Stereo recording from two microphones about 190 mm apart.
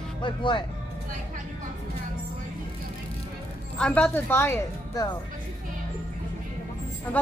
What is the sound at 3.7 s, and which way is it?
Speech, 5° left (ahead or behind).